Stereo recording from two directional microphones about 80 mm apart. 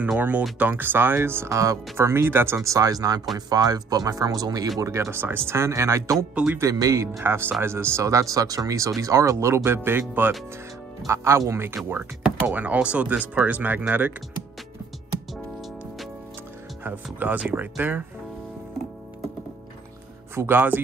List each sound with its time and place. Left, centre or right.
0.4 s speech: centre; by 6.1 s right
6.3 s speech: centre
6.6 s speech: right
7.1 s speech: right
11.1 s speech: right
12.7 s speech: centre
16.8 s speech: right
20.3 s speech: right